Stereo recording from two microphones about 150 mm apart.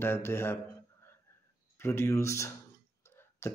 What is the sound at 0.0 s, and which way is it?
Speech, 15° left (ahead or behind).